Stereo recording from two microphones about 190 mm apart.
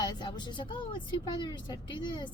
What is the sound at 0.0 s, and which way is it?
A woman's voice, 25° left (ahead or behind).